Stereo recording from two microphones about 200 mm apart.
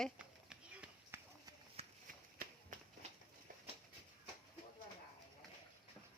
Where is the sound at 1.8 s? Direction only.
30° right (ahead or behind).